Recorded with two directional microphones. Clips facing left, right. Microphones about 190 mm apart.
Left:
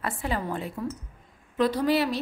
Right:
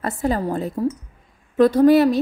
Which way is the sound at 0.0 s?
40° right (ahead or behind).